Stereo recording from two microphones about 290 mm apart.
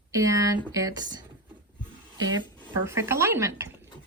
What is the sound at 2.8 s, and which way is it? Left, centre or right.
Speech, centre.